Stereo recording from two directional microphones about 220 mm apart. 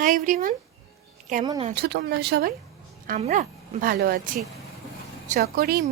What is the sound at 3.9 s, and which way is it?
Speech, 45° right (ahead or behind).